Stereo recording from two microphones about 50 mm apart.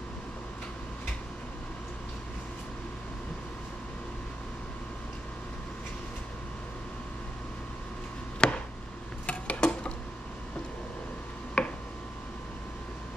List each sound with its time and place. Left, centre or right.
8.4 s chop: centre
9.2 s a sound: left
11.6 s tick-tock: left